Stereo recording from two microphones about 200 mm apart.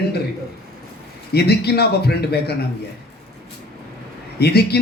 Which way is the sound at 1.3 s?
55° left (ahead or behind).